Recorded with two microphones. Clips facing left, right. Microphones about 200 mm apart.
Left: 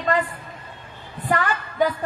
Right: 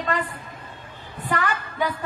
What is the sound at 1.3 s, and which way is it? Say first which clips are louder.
Speech: left 2 dB; 45° left (ahead or behind).